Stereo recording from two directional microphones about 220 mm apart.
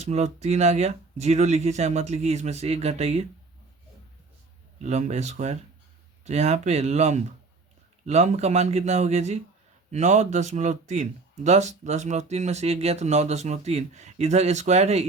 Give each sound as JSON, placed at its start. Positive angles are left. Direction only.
{"t": 0.0, "sound": "speech", "side_deg": -30}
{"t": 4.8, "sound": "speech", "side_deg": -30}